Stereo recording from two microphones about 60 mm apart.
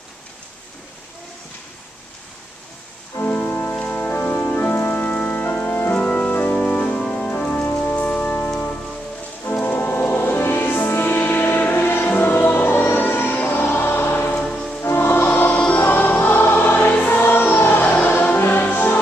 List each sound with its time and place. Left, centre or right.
3.3 s music: left
5.9 s organ: centre
6.3 s organ: left
7.0 s music: centre
7.2 s organ: left
9.4 s music: left
14.3 s music: centre
14.8 s music: left
15.5 s music: left